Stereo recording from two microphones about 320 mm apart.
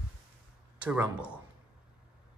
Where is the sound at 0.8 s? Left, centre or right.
Centre.